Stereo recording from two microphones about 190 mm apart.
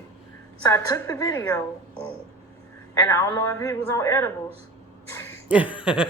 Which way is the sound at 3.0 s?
15° left (ahead or behind).